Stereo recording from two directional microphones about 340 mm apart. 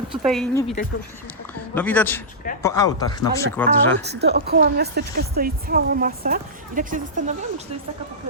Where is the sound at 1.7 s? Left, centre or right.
Centre.